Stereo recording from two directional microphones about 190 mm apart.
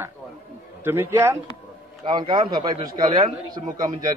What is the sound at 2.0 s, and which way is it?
A man's voice, 25° right (ahead or behind).